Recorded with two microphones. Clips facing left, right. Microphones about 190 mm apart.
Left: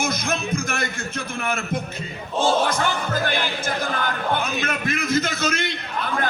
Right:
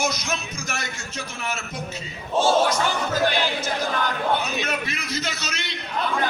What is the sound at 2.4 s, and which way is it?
Speech, 55° left (ahead or behind).